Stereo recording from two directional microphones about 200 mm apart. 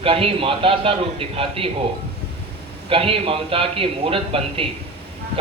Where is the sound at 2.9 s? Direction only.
30° right (ahead or behind).